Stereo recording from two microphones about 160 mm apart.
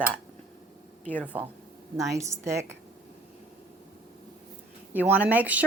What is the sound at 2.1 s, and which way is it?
Speech, 20° right (ahead or behind).